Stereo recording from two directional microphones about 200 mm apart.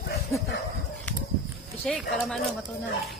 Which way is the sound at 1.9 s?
5° left (ahead or behind).